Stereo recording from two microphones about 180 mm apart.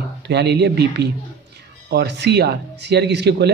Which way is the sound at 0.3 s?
65° right (ahead or behind).